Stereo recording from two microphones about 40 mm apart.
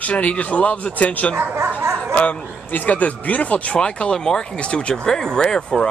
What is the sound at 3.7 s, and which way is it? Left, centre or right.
Speech, left.